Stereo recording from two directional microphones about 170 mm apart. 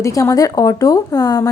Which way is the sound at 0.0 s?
20° left (ahead or behind).